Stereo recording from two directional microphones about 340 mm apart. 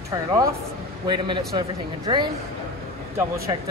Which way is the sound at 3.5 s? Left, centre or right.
Centre.